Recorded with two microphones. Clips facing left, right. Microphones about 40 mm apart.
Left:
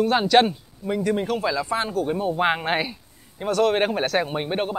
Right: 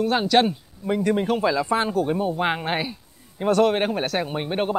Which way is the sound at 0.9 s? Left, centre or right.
Centre.